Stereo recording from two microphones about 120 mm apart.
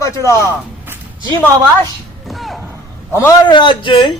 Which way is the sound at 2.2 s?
Centre (ahead or behind).